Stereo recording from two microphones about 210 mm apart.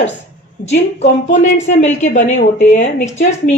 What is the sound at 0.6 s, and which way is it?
A woman's voice, 30° left (ahead or behind).